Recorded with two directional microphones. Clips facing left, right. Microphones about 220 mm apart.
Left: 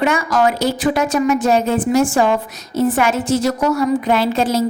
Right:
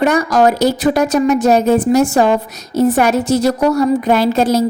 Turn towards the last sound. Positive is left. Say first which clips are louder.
# right 4 dB
turn(degrees=-40)  # may be behind; listen again after turning